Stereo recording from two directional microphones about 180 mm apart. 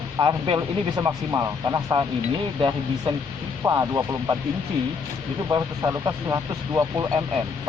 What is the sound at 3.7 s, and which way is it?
Speech, 20° right (ahead or behind).